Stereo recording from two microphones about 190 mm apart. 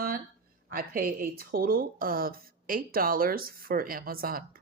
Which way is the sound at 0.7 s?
50° right (ahead or behind).